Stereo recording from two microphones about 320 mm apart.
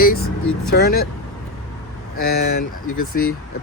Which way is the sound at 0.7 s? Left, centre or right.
Left.